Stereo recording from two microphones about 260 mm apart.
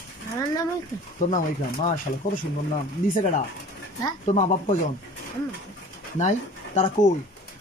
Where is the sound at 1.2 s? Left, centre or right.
Left.